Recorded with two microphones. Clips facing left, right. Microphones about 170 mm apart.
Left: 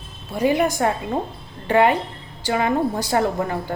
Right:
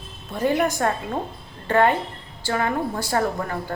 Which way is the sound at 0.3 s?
10° left (ahead or behind).